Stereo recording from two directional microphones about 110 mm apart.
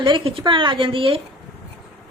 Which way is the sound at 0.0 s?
50° right (ahead or behind).